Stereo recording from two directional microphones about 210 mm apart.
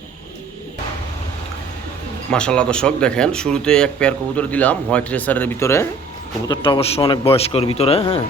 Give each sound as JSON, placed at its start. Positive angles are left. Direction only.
{"t": 2.3, "sound": "speech", "side_deg": 5}
{"t": 6.5, "sound": "a man's voice", "side_deg": 25}